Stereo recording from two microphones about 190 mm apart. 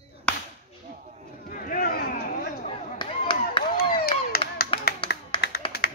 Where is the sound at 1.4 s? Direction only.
45° left (ahead or behind).